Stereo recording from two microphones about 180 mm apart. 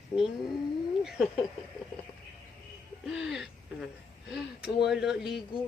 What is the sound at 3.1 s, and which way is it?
Speech, 5° right (ahead or behind).